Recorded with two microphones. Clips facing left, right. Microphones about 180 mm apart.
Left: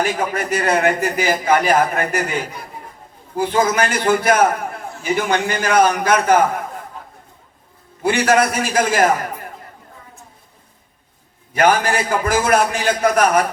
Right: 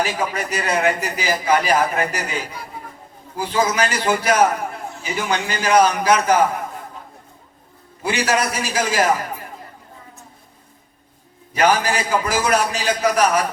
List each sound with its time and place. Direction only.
0.0 s a man's voice: 55° left (ahead or behind)
8.0 s a man's voice: 55° left (ahead or behind)
11.5 s a man's voice: 50° left (ahead or behind)